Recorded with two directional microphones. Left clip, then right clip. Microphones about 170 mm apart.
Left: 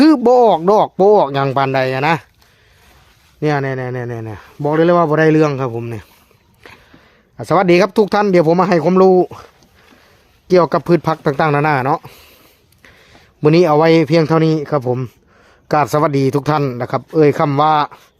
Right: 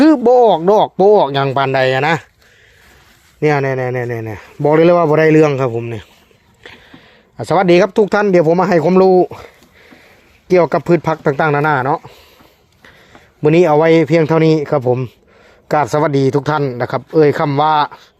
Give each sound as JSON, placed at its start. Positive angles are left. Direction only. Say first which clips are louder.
{"t": 0.0, "sound": "speech", "louder": "right 1 dB", "side_deg": 15}
{"t": 3.4, "sound": "speech", "louder": "right 4 dB", "side_deg": 0}
{"t": 5.7, "sound": "speech", "louder": "right 3 dB", "side_deg": 10}
{"t": 7.3, "sound": "speech", "louder": "right 1 dB", "side_deg": 5}
{"t": 8.4, "sound": "a man's voice", "louder": "right 1 dB", "side_deg": 20}
{"t": 8.7, "sound": "speech", "louder": "right 1 dB", "side_deg": 5}
{"t": 10.5, "sound": "speech", "louder": "right 1 dB", "side_deg": 5}
{"t": 13.5, "sound": "speech", "louder": "right 1 dB", "side_deg": 15}